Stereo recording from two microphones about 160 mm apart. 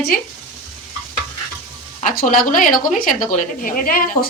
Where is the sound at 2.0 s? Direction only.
65° left (ahead or behind).